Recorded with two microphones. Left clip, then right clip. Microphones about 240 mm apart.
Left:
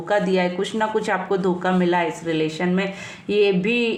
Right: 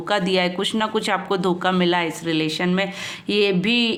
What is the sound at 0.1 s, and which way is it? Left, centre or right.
Speech, right.